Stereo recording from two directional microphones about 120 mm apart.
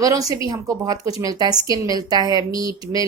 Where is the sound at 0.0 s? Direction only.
30° right (ahead or behind).